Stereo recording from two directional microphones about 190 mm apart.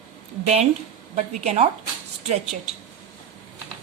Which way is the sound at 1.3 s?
35° right (ahead or behind).